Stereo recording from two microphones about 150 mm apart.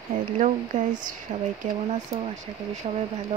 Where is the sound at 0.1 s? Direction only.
60° right (ahead or behind).